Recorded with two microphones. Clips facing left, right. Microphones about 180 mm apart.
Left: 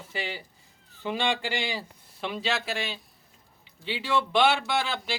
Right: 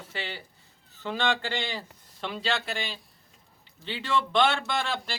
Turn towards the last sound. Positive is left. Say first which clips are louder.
# left 2 dB
turn(degrees=5)  # may be behind; listen again after turning